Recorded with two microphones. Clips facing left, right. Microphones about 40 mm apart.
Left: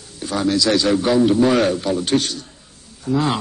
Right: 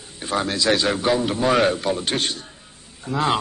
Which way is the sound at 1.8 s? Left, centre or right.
Centre.